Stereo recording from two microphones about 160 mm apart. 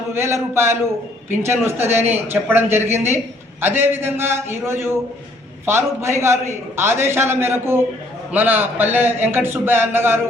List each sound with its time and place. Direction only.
0.1 s a man's voice: 15° right (ahead or behind)